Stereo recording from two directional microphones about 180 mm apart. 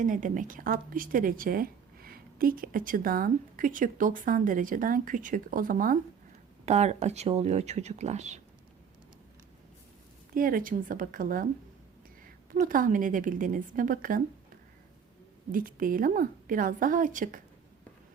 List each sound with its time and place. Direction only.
0.0 s speech: 45° right (ahead or behind)
6.7 s speech: 40° right (ahead or behind)
10.3 s speech: 50° right (ahead or behind)
12.5 s speech: 50° right (ahead or behind)
15.5 s speech: 50° right (ahead or behind)